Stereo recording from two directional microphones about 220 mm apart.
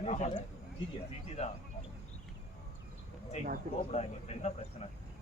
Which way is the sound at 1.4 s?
30° left (ahead or behind).